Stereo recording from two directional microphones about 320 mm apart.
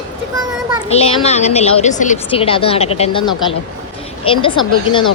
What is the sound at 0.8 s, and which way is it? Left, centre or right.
A woman's voice, centre.